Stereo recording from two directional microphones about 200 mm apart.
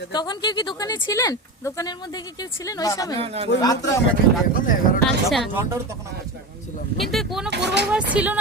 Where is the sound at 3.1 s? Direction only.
30° right (ahead or behind).